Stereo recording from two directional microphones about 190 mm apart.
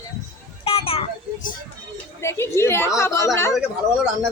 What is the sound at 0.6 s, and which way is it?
Children playing, 30° left (ahead or behind).